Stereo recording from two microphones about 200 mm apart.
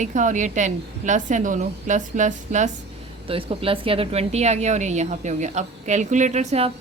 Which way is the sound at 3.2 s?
30° right (ahead or behind).